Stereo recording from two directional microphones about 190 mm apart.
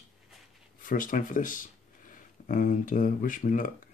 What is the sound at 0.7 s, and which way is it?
Speech, 45° left (ahead or behind).